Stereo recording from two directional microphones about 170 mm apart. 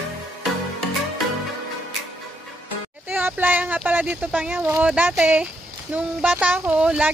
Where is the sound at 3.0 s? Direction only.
10° right (ahead or behind).